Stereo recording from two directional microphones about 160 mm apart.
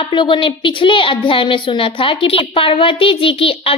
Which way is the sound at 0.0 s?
30° left (ahead or behind).